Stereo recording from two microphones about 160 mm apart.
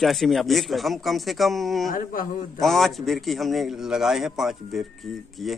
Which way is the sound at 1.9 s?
60° left (ahead or behind).